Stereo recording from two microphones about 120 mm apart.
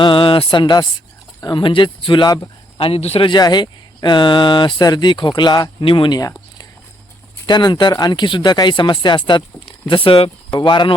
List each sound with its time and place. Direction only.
0.0 s speech: 45° left (ahead or behind)
2.7 s speech: 50° left (ahead or behind)
3.2 s speech: 35° left (ahead or behind)
7.4 s speech: 35° left (ahead or behind)